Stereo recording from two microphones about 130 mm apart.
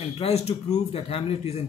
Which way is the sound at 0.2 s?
55° left (ahead or behind).